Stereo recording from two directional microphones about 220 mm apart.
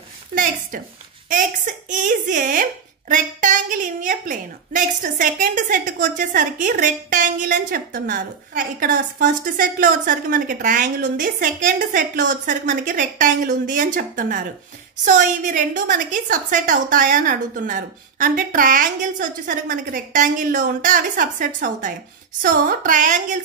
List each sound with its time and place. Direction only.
0.3 s a woman's voice: 35° right (ahead or behind)